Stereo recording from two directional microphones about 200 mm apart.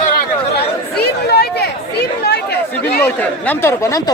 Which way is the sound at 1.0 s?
55° left (ahead or behind).